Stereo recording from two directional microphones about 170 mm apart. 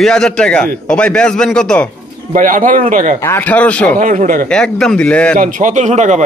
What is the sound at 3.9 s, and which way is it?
Speech, 50° right (ahead or behind).